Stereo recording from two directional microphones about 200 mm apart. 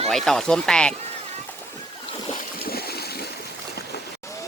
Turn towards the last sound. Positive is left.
turn(degrees=50)  # may be behind; listen again after turning